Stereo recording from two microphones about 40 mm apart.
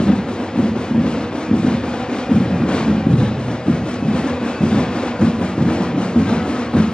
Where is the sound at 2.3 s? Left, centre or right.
Left.